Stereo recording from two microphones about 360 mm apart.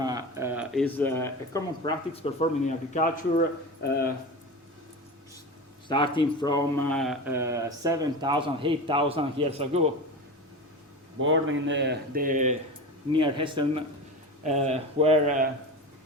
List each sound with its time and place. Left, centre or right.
0.0 s speech: centre; by 3.4 s left
5.9 s speech: centre
11.2 s speech: right